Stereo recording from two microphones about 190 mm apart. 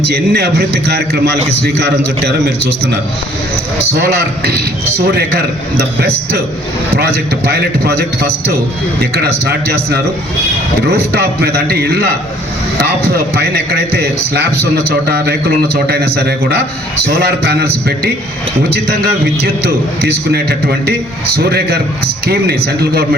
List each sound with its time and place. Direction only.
0.1 s a man's voice: 60° right (ahead or behind)
6.9 s a man's voice: 55° right (ahead or behind)